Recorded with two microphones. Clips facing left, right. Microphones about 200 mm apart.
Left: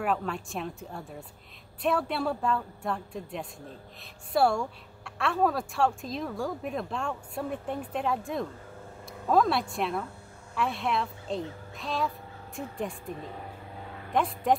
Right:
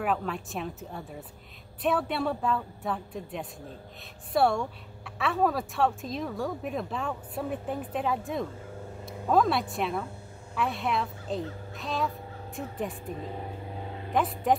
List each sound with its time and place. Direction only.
0.0 s a woman's voice: centre (ahead or behind)
13.8 s vehicle: 25° right (ahead or behind)
14.1 s a woman's voice: centre (ahead or behind)